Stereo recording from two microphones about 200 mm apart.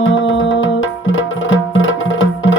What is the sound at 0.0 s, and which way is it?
Music, 70° left (ahead or behind).